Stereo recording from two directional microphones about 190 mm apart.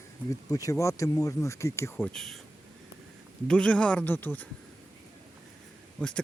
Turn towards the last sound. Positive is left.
turn(degrees=5)  # may be behind; listen again after turning